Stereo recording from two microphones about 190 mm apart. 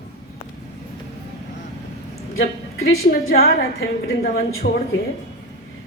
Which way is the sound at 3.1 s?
55° left (ahead or behind).